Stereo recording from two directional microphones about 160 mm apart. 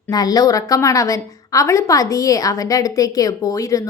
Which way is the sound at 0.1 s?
25° left (ahead or behind).